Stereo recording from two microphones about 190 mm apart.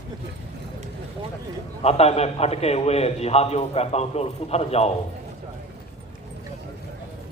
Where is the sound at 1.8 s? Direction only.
35° left (ahead or behind).